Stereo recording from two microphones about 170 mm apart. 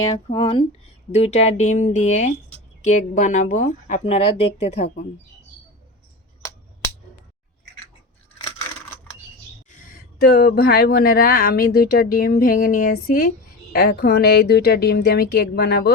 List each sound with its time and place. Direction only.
0.1 s speech: 30° left (ahead or behind)
9.6 s speech: 55° left (ahead or behind); by 15.9 s 70° left (ahead or behind)